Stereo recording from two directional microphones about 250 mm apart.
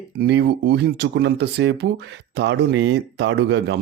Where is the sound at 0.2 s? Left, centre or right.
Right.